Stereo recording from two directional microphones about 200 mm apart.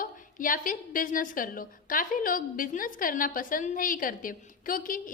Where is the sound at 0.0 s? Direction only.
45° left (ahead or behind).